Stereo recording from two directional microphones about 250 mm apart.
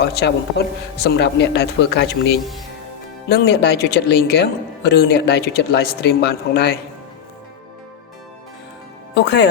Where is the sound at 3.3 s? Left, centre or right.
Left.